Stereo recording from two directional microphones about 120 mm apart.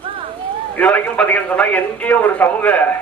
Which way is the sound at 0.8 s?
10° left (ahead or behind).